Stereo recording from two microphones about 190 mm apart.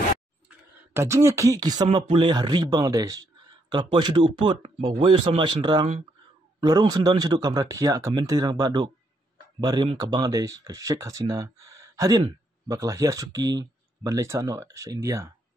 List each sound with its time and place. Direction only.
0.5 s speech: 15° right (ahead or behind)